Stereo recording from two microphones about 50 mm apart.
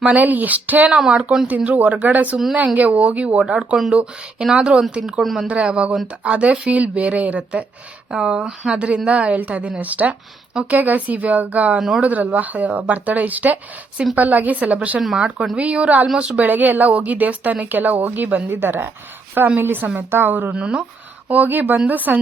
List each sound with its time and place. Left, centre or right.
0.0 s a woman's voice: right
0.9 s speech: centre
1.5 s a woman's voice: right; by 5.5 s centre
5.5 s a woman's voice: right
8.1 s a woman's voice: centre
15.0 s speech: centre
15.5 s a woman's voice: right
18.4 s a woman's voice: right
20.6 s a woman's voice: right
21.2 s a woman's voice: right